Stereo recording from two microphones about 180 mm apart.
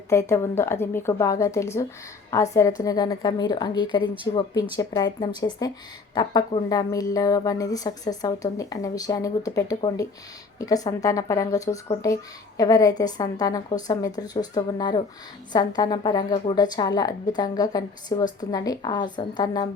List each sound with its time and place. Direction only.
0.1 s a woman's voice: 15° left (ahead or behind)